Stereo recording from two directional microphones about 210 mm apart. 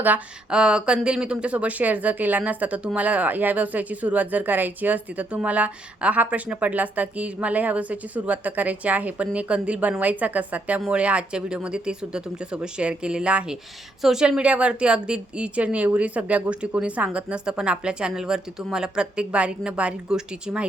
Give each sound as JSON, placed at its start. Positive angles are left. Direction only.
{"t": 0.0, "sound": "a woman's voice", "side_deg": -5}